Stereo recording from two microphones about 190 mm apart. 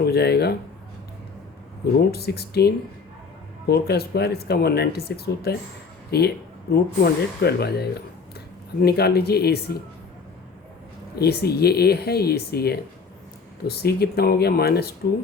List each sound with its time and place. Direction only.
0.0 s speech: 55° left (ahead or behind)
2.0 s speech: 55° left (ahead or behind)
11.1 s speech: 55° left (ahead or behind)